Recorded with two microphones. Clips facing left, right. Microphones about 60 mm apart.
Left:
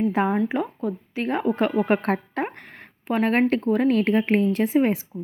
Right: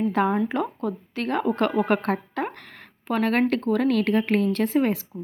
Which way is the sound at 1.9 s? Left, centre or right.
Left.